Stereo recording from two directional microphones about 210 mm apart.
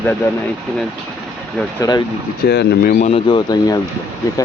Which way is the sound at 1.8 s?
20° left (ahead or behind).